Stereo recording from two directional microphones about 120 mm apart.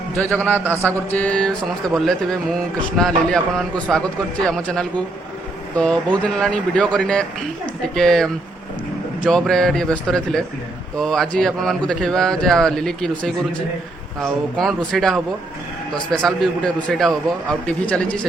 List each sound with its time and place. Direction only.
0.2 s speech: 10° left (ahead or behind)
0.6 s a sound: 20° right (ahead or behind)
0.9 s a man's voice: 10° left (ahead or behind)
9.3 s a man's voice: 5° left (ahead or behind)